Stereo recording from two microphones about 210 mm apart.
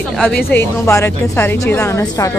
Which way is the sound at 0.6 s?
10° left (ahead or behind).